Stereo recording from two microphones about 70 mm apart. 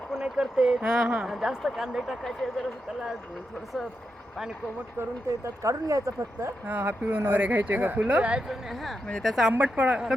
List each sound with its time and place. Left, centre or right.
0.1 s speech: centre
4.9 s speech: right
6.7 s speech: right
8.4 s speech: centre
9.5 s speech: centre